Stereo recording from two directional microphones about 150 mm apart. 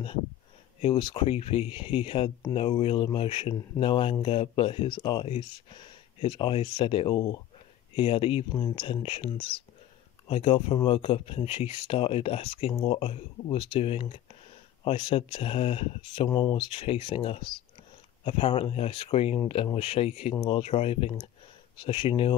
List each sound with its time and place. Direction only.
0.7 s speech: 35° left (ahead or behind)
16.3 s speech: 25° left (ahead or behind)